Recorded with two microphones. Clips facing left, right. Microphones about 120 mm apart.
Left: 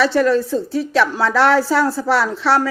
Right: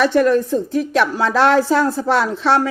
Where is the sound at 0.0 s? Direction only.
15° right (ahead or behind).